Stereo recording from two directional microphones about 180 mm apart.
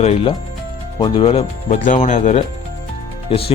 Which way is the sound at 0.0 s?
35° left (ahead or behind).